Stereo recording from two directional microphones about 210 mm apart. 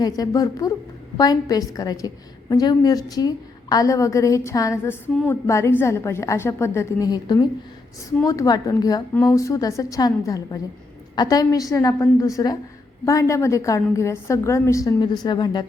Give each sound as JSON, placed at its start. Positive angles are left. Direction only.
{"t": 0.0, "sound": "a woman's voice", "side_deg": 15}